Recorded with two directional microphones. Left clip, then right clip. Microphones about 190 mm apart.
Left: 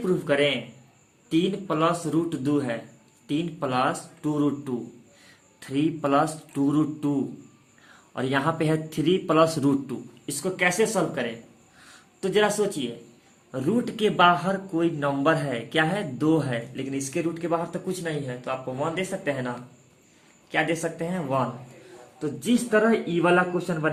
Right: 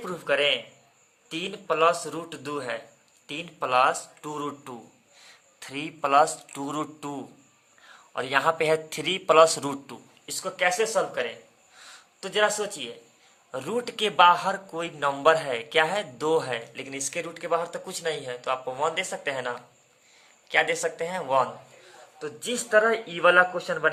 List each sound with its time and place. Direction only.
0.0 s a man's voice: 25° right (ahead or behind)
9.8 s speech: 20° right (ahead or behind)
13.5 s a man's voice: 40° right (ahead or behind)
22.7 s speech: 25° right (ahead or behind)